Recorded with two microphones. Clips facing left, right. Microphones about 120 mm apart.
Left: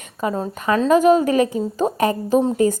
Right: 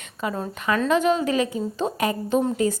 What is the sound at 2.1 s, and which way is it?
Speech, 35° left (ahead or behind).